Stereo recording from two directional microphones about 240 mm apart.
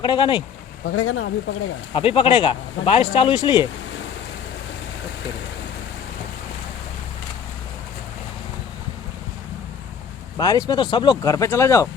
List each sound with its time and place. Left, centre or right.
0.0 s speech: centre
0.9 s speech: left
1.9 s speech: left
10.3 s speech: centre